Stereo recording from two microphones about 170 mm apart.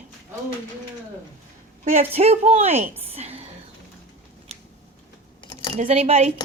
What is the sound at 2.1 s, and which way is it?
Speech, 40° right (ahead or behind).